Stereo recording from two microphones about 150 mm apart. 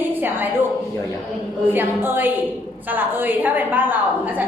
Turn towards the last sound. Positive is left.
turn(degrees=-10)  # may be behind; listen again after turning